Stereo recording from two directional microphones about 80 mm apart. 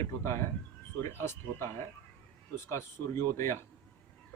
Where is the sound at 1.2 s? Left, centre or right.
Left.